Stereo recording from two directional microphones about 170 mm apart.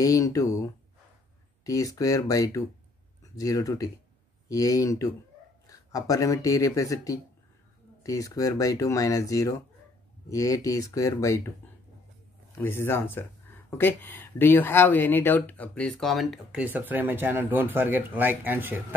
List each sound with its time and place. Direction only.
0.0 s speech: 20° left (ahead or behind)
12.5 s speech: 15° left (ahead or behind); by 18.9 s 10° right (ahead or behind)